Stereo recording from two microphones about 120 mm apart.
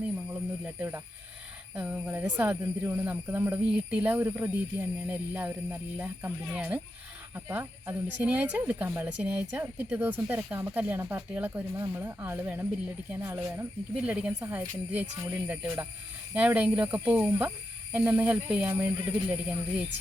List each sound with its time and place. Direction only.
0.6 s speech: 15° right (ahead or behind)